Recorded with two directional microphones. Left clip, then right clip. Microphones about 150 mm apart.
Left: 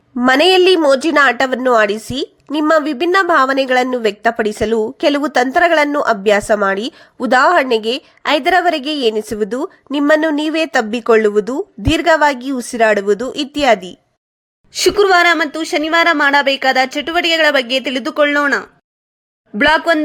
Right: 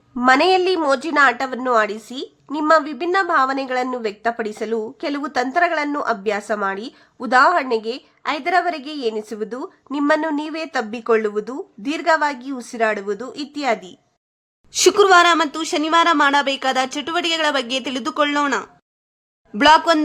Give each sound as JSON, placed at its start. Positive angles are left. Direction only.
{"t": 0.3, "sound": "a woman's voice", "side_deg": 25}
{"t": 14.7, "sound": "speech", "side_deg": 5}
{"t": 19.5, "sound": "speech", "side_deg": 5}